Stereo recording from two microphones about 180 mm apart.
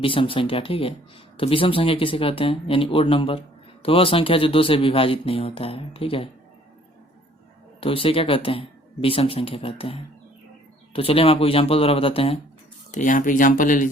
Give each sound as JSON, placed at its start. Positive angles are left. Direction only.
{"t": 0.0, "sound": "speech", "side_deg": 30}
{"t": 7.8, "sound": "speech", "side_deg": 30}
{"t": 12.9, "sound": "speech", "side_deg": 45}